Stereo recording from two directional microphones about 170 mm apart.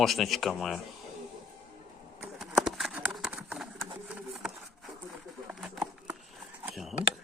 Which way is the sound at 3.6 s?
Centre (ahead or behind).